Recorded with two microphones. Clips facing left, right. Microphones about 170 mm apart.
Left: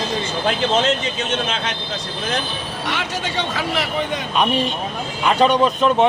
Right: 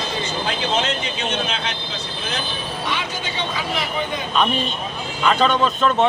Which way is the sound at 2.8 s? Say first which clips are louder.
Left 3 dB; 85° left.